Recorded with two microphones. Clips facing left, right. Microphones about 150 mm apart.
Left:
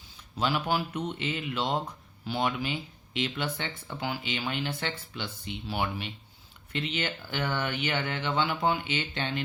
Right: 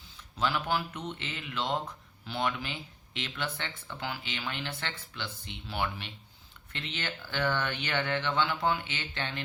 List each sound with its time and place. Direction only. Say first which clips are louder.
0.3 s speech: left 2 dB; 15° left (ahead or behind)